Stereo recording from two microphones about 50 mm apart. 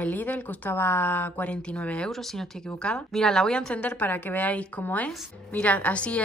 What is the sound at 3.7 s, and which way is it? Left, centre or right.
A woman's voice, left.